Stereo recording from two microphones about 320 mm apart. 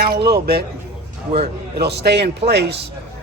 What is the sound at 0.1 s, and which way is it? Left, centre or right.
A man's voice, right.